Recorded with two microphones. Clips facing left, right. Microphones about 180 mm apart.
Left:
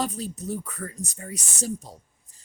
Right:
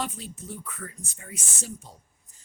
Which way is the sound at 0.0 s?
40° left (ahead or behind).